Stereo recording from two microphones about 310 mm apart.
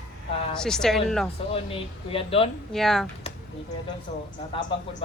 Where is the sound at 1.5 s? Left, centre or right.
Centre.